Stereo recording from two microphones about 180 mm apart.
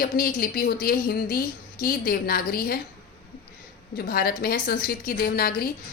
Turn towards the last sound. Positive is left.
turn(degrees=55)  # may be behind; listen again after turning